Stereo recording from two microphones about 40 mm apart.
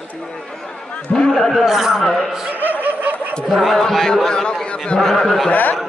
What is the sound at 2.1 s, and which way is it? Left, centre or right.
Speech, centre.